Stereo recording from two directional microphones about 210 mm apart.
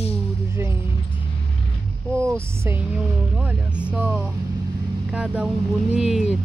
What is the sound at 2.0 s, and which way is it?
Vehicle, 10° right (ahead or behind).